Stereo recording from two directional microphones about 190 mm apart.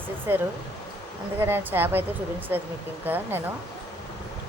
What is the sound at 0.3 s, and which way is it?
Speech, 10° right (ahead or behind).